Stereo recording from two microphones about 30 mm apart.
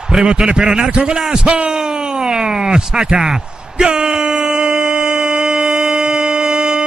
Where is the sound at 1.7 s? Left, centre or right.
Right.